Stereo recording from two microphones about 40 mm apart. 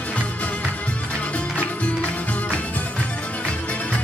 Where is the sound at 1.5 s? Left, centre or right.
Left.